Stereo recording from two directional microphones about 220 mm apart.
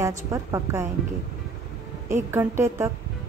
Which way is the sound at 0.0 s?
15° right (ahead or behind).